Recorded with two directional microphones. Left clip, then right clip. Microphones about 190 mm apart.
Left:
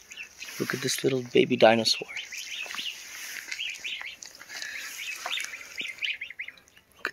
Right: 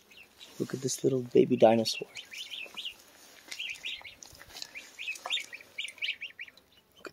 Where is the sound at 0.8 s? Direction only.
10° right (ahead or behind).